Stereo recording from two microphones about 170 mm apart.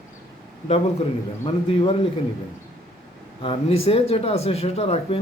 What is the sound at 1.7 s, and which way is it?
Speech, 35° left (ahead or behind).